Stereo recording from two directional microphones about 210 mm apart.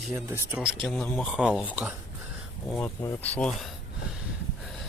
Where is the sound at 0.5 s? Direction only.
Centre (ahead or behind).